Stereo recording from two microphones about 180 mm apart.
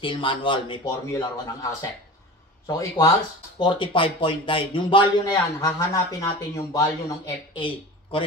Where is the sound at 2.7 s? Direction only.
20° left (ahead or behind).